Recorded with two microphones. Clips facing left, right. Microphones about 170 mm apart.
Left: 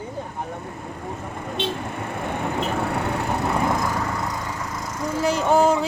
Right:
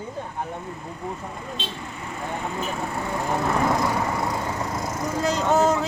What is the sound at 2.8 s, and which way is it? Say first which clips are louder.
Splinter: left 4 dB; 70° left (ahead or behind).